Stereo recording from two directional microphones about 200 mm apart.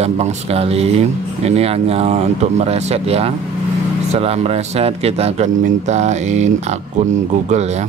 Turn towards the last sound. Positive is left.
turn(degrees=-35)  # may be behind; listen again after turning